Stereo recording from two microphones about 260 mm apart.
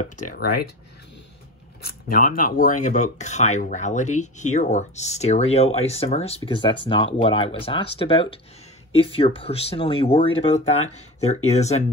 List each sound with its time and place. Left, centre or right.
0.3 s speech: left
2.0 s speech: left